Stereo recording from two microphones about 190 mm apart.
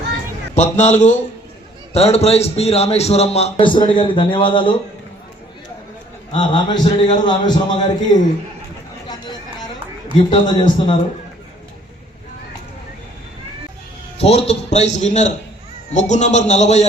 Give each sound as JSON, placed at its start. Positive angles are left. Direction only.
{"t": 0.5, "sound": "a man's voice", "side_deg": 40}
{"t": 6.3, "sound": "a man's voice", "side_deg": 25}
{"t": 10.4, "sound": "a man's voice", "side_deg": 25}
{"t": 14.2, "sound": "a man's voice", "side_deg": 35}